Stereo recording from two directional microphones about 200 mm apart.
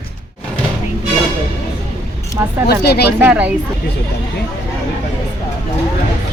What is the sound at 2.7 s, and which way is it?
Speech, 55° left (ahead or behind).